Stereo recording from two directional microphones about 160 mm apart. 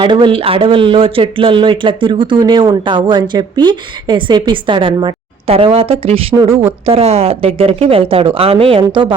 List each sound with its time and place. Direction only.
0.0 s speech: 30° right (ahead or behind)